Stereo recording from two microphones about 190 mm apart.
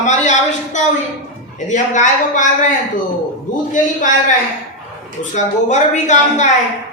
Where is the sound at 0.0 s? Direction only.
40° left (ahead or behind).